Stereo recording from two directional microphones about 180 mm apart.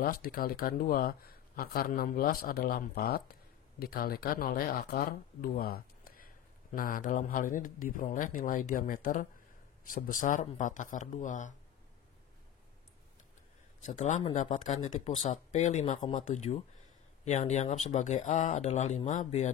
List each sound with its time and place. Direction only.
0.0 s speech: 55° left (ahead or behind)
13.8 s speech: 40° left (ahead or behind)